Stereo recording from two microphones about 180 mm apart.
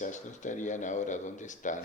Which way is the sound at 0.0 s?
45° left (ahead or behind).